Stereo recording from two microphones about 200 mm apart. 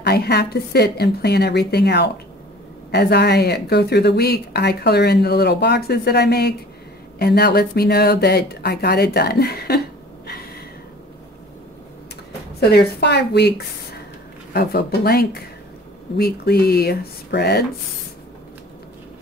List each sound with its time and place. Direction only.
0.0 s speech: 55° left (ahead or behind)
12.5 s speech: 55° left (ahead or behind)